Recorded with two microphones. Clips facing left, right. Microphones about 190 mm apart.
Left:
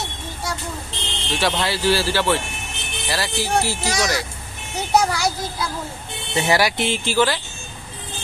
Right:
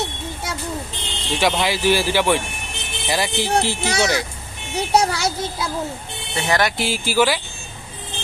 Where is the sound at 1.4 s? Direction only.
10° right (ahead or behind).